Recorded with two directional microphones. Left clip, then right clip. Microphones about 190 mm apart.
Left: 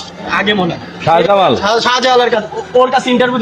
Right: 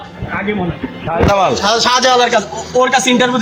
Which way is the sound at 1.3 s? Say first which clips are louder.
Right 1 dB; 50° left (ahead or behind).